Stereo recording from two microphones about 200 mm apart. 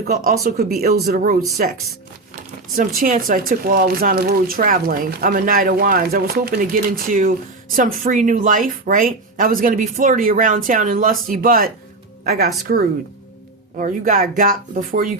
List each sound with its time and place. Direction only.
0.1 s speech: 50° right (ahead or behind)
3.0 s speech: 45° right (ahead or behind)